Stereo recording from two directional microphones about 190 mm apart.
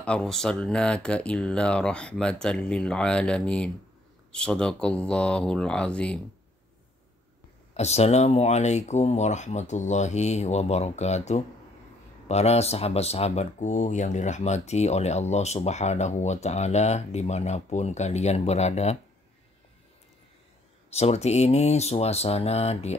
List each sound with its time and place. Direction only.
0.0 s speech: 5° left (ahead or behind)
7.7 s speech: 35° left (ahead or behind)
20.9 s speech: 35° left (ahead or behind)